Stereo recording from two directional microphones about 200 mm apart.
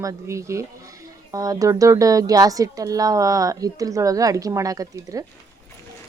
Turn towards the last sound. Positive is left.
turn(degrees=-15)  # may be behind; listen again after turning